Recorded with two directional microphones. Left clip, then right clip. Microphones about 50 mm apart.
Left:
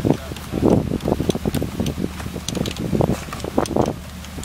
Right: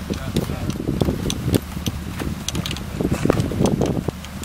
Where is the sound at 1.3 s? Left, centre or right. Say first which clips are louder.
Left 1 dB; centre.